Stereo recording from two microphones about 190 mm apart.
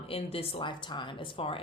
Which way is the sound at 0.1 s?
30° left (ahead or behind).